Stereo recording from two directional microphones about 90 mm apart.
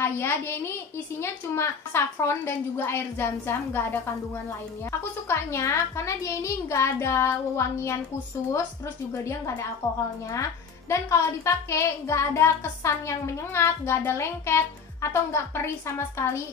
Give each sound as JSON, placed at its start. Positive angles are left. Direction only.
{"t": 0.0, "sound": "a child's voice", "side_deg": 25}
{"t": 5.3, "sound": "speech", "side_deg": 30}
{"t": 9.1, "sound": "a child's voice", "side_deg": 30}